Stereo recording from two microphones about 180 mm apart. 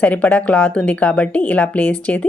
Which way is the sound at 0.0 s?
5° left (ahead or behind).